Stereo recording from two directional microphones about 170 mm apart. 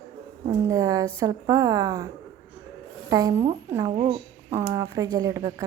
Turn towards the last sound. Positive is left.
turn(degrees=-20)  # may be behind; listen again after turning